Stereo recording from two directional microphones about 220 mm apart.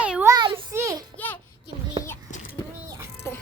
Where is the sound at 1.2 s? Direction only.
5° left (ahead or behind).